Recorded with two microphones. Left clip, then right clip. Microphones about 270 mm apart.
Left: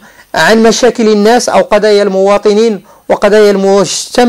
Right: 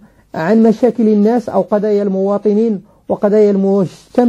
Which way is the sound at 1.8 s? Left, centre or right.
Centre.